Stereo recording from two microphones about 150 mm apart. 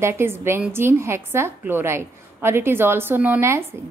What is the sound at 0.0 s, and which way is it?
A woman's voice, 15° right (ahead or behind).